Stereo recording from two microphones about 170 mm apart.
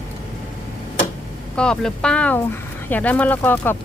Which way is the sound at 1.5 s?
5° left (ahead or behind).